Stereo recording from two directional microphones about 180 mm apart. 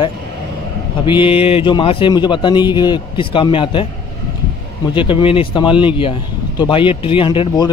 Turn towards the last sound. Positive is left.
turn(degrees=25)  # may be behind; listen again after turning